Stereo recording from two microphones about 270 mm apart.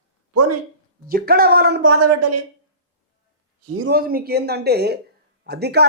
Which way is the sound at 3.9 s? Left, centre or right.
Right.